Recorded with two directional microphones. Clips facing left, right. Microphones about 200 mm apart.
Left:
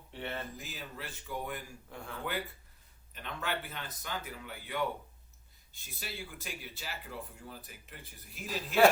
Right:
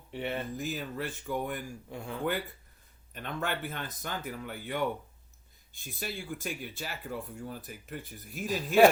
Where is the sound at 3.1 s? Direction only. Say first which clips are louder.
Right 3 dB; 50° right (ahead or behind).